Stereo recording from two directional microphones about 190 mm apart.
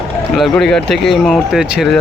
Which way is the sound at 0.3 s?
Centre (ahead or behind).